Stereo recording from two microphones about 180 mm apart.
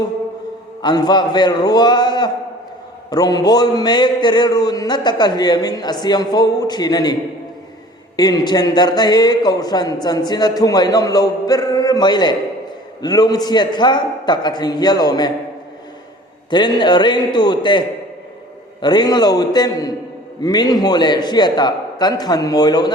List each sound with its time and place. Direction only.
0.8 s speech: 25° left (ahead or behind)
16.5 s speech: 25° left (ahead or behind)